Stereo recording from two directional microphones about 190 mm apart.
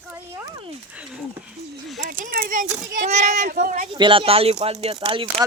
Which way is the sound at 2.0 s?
50° right (ahead or behind).